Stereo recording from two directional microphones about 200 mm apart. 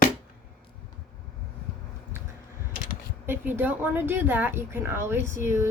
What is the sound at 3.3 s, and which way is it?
A woman's voice, 10° right (ahead or behind).